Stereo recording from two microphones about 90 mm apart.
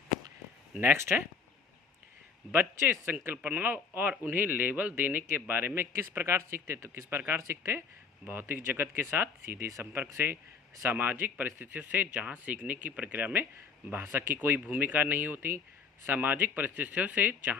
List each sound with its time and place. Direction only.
0.8 s a man's voice: 25° right (ahead or behind)
2.5 s a man's voice: 20° right (ahead or behind)